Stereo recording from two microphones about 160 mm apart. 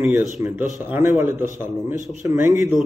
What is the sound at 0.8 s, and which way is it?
Speech, 15° right (ahead or behind).